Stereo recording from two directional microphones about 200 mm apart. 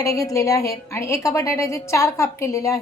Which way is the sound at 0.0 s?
15° left (ahead or behind).